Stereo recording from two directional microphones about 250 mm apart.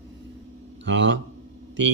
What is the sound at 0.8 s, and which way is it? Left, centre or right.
Speech, right.